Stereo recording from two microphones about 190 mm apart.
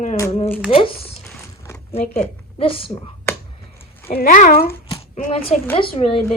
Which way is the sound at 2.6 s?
30° left (ahead or behind).